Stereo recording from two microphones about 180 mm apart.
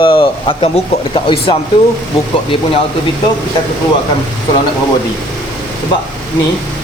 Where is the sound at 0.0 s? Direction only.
30° left (ahead or behind).